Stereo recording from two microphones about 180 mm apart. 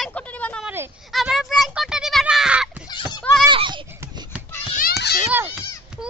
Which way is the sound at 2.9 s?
25° left (ahead or behind).